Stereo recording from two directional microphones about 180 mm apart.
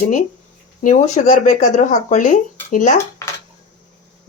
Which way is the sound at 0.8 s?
40° left (ahead or behind).